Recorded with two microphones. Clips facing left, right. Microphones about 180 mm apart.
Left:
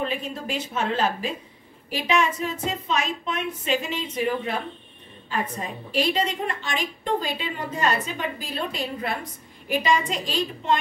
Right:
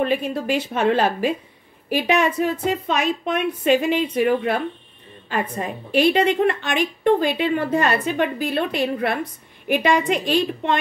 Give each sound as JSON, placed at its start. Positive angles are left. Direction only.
{"t": 0.0, "sound": "a woman's voice", "side_deg": -60}